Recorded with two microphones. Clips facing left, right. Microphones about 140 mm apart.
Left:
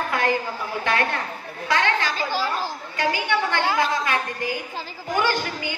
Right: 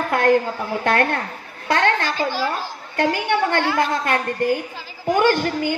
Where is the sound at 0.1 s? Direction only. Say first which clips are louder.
Right 8 dB; 55° right (ahead or behind).